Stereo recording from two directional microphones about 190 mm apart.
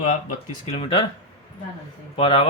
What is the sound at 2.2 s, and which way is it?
Speech, 30° left (ahead or behind).